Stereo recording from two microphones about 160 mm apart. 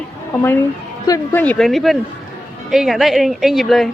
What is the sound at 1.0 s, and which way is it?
A woman's voice, 20° left (ahead or behind).